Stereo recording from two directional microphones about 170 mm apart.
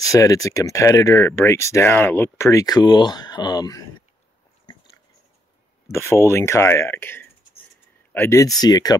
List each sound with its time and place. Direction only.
0.0 s speech: 20° left (ahead or behind)
5.9 s speech: 15° left (ahead or behind)